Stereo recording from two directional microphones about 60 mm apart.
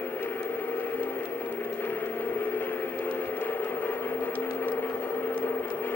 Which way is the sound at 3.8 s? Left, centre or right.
Left.